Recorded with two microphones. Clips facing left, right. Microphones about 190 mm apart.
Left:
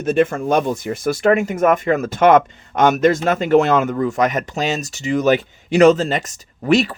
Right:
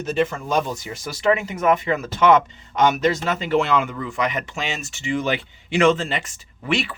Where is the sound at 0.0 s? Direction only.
55° left (ahead or behind).